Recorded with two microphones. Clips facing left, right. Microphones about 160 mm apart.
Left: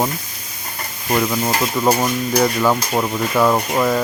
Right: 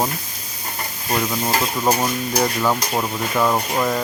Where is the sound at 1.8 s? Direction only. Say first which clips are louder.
Left 4 dB; centre (ahead or behind).